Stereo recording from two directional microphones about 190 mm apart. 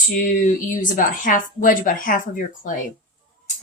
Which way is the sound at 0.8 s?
45° left (ahead or behind).